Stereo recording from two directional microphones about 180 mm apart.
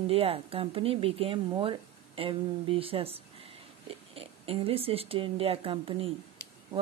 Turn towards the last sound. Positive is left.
turn(degrees=-30)  # may be behind; listen again after turning